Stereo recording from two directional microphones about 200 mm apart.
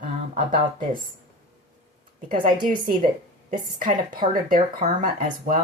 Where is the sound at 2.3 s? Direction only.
45° right (ahead or behind).